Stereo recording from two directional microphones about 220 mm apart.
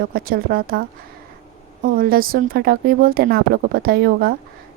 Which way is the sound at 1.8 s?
40° right (ahead or behind).